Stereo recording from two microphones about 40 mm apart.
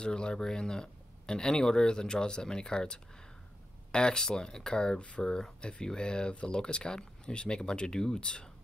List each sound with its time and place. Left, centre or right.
0.0 s speech: left